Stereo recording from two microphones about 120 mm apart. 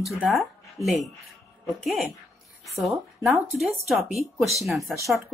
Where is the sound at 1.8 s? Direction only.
Centre (ahead or behind).